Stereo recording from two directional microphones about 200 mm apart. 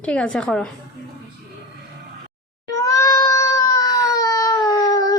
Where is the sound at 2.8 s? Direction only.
15° left (ahead or behind).